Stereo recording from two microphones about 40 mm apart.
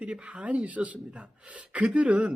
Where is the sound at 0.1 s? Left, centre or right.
Right.